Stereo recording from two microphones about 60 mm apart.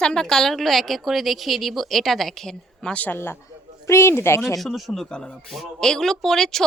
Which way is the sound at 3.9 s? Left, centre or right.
Left.